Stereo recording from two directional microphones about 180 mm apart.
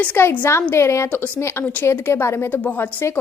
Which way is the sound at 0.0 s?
10° left (ahead or behind).